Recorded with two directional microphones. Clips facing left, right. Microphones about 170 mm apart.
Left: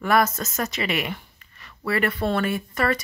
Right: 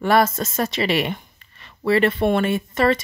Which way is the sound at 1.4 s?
25° right (ahead or behind).